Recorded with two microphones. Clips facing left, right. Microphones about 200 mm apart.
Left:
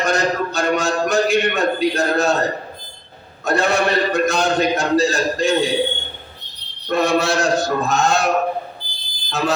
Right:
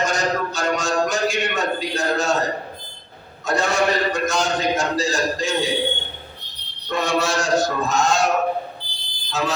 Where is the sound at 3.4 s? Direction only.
60° left (ahead or behind).